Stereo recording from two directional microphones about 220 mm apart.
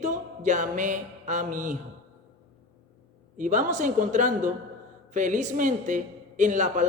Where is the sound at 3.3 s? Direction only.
35° right (ahead or behind).